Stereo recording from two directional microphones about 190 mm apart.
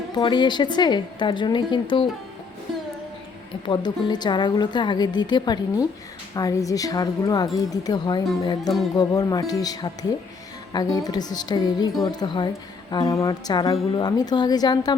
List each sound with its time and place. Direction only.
0.1 s a woman's voice: 25° left (ahead or behind)
3.7 s a woman's voice: 20° left (ahead or behind)